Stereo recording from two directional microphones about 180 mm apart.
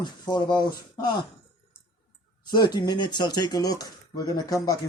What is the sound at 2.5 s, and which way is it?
Speech, 25° left (ahead or behind).